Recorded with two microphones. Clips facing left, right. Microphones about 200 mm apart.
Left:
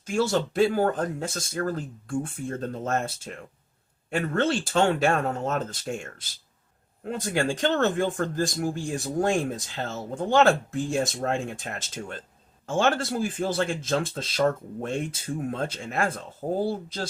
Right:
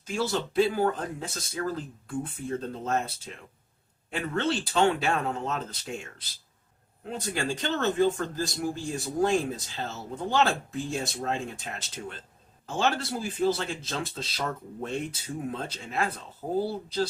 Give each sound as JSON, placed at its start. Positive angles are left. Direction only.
{"t": 0.0, "sound": "speech", "side_deg": 45}